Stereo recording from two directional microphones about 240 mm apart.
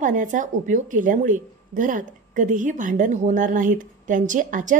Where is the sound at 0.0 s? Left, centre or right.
Right.